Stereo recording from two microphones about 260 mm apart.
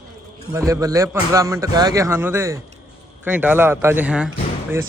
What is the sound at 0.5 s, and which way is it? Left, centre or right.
A man's voice, centre.